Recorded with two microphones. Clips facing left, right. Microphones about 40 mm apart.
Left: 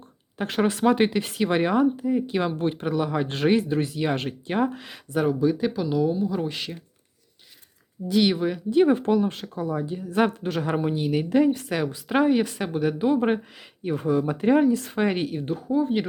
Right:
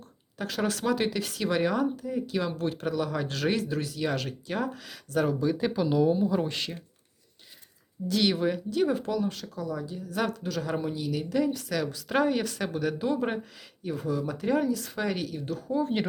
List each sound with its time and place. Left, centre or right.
0.3 s speech: left
5.1 s speech: centre
8.0 s speech: centre
8.7 s speech: left
12.0 s speech: centre
15.6 s speech: centre